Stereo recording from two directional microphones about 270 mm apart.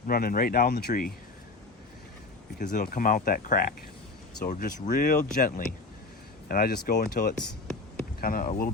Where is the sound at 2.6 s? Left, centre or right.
Left.